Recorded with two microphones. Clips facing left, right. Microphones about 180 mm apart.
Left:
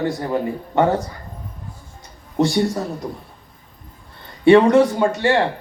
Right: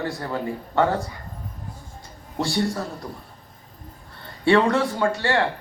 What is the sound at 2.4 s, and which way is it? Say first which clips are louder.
Speech: left 6 dB; 20° left (ahead or behind).